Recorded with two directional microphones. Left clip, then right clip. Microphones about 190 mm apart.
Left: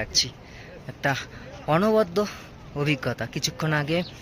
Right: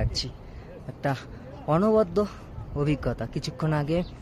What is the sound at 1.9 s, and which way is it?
Speech, 15° right (ahead or behind).